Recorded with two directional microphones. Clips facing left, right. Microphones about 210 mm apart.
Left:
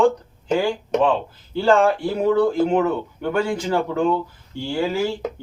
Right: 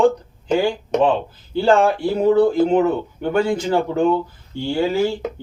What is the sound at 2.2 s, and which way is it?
Speech, 35° right (ahead or behind).